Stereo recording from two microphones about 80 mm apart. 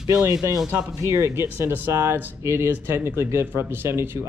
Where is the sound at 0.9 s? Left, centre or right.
Right.